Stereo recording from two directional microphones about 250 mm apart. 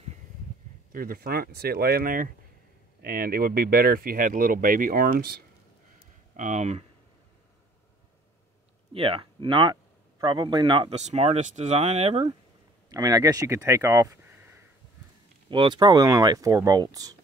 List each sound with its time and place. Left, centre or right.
0.9 s speech: right
8.9 s speech: right
15.5 s speech: centre